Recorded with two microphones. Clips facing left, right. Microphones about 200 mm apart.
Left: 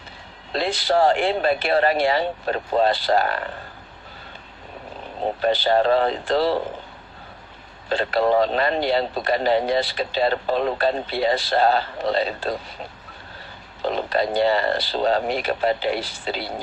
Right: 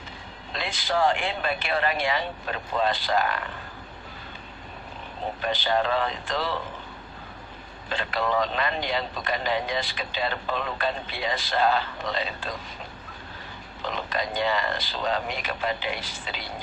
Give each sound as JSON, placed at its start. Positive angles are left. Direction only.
{"t": 0.8, "sound": "a man's voice", "side_deg": 35}
{"t": 5.4, "sound": "a man's voice", "side_deg": 35}
{"t": 7.9, "sound": "a man's voice", "side_deg": 35}
{"t": 13.8, "sound": "a man's voice", "side_deg": 35}